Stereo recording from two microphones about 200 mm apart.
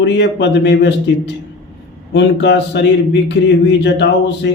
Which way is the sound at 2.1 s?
60° left (ahead or behind).